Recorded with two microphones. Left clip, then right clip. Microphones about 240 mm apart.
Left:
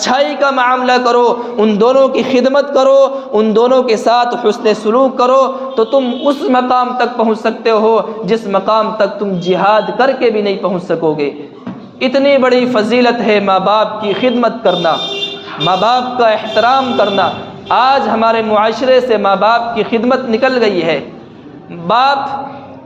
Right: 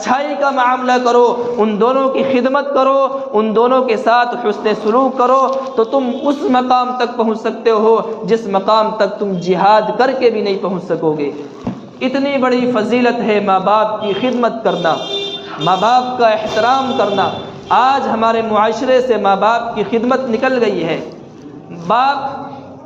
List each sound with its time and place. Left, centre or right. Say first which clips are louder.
0.0 s a man's voice: left 3 dB; left